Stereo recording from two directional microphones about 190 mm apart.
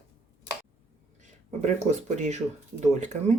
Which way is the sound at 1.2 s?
40° right (ahead or behind).